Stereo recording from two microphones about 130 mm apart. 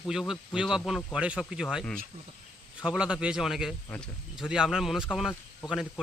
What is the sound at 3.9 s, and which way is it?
Speech, 10° left (ahead or behind).